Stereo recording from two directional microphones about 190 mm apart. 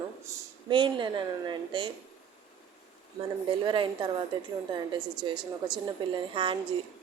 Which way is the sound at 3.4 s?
25° right (ahead or behind).